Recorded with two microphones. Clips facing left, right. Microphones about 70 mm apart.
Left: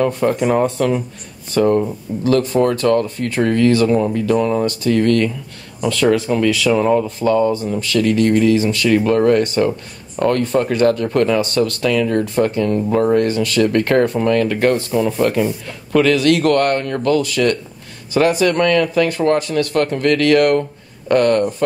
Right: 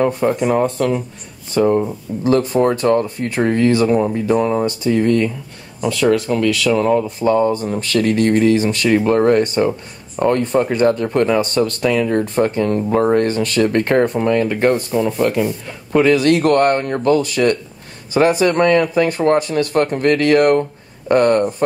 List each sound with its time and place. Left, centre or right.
0.2 s speech: centre
2.2 s speech: right
6.0 s speech: centre
7.1 s speech: right
9.7 s speech: right
14.1 s speech: centre
15.0 s speech: centre
15.9 s speech: right